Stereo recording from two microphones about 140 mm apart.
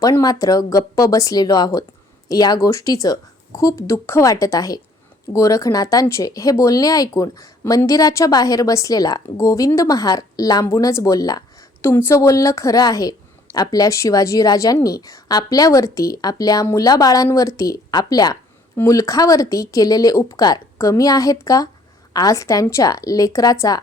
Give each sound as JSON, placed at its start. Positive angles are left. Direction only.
{"t": 0.0, "sound": "speech", "side_deg": 25}